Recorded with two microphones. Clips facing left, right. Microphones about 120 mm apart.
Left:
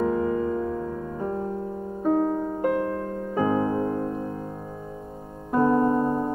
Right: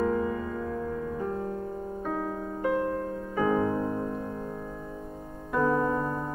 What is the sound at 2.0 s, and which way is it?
Music, 30° left (ahead or behind).